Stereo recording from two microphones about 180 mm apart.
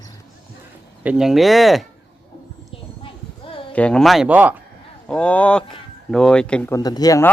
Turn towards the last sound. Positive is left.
turn(degrees=20)  # may be behind; listen again after turning